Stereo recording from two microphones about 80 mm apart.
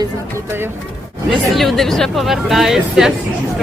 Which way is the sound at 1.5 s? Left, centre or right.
Centre.